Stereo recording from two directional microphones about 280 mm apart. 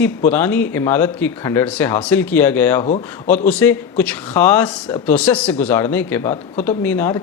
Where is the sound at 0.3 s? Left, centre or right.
Centre.